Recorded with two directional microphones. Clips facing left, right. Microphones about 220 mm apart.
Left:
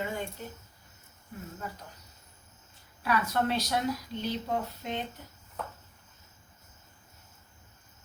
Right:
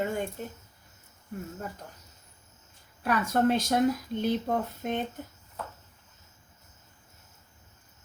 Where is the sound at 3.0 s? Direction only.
50° right (ahead or behind).